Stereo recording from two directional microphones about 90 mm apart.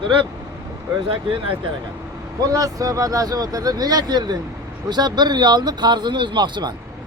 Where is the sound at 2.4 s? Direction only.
40° right (ahead or behind).